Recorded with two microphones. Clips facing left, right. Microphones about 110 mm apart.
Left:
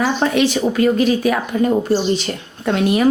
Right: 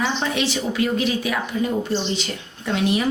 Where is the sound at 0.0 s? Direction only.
50° left (ahead or behind).